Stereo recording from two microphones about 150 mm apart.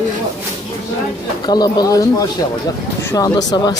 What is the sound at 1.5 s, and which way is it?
Speech, 25° left (ahead or behind).